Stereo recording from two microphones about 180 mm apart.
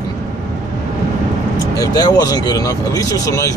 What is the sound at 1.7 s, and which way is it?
Speech, 20° left (ahead or behind).